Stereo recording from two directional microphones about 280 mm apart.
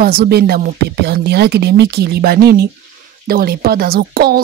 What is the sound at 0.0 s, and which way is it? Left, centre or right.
Speech, right.